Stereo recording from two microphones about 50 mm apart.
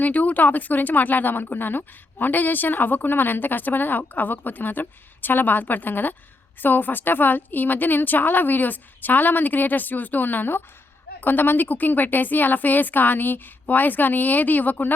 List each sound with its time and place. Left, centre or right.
0.0 s speech: left